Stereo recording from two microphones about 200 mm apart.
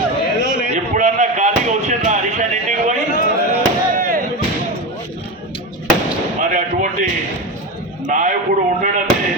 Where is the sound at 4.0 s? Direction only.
45° right (ahead or behind).